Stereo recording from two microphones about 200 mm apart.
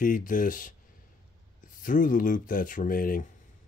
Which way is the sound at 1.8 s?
40° left (ahead or behind).